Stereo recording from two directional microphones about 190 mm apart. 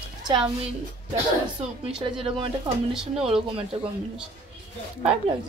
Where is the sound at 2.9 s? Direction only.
Centre (ahead or behind).